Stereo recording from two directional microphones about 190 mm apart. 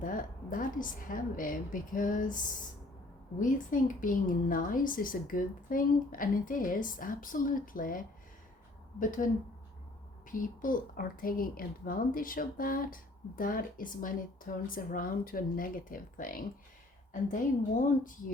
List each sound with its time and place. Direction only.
0.0 s a woman's voice: 45° left (ahead or behind)
3.4 s a woman's voice: 45° left (ahead or behind)